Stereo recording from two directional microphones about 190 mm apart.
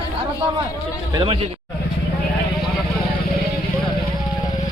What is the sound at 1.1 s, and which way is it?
Speech, 25° right (ahead or behind).